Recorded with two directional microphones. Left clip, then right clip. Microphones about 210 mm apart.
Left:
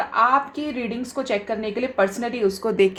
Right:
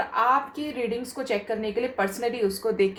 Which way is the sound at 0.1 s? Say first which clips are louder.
Left 5 dB; 40° left (ahead or behind).